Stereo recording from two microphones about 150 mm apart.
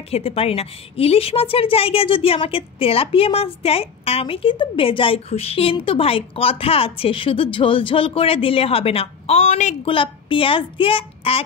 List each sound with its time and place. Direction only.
0.1 s a woman's voice: 40° left (ahead or behind)
9.8 s a woman's voice: 35° left (ahead or behind)